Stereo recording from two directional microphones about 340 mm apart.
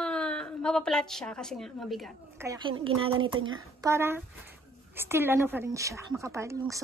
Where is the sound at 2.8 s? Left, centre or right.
Centre.